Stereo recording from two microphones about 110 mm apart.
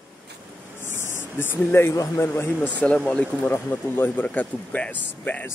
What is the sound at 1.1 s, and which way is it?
Speech, 20° left (ahead or behind).